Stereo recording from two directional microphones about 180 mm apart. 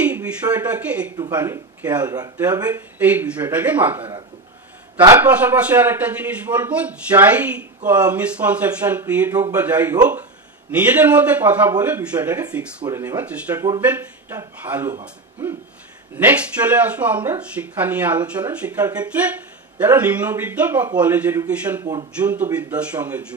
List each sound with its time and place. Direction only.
0.0 s a man's voice: 10° right (ahead or behind)
16.6 s speech: 20° right (ahead or behind)
16.9 s a man's voice: 10° right (ahead or behind)